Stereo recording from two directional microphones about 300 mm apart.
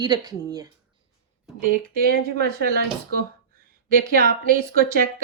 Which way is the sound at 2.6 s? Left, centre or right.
Right.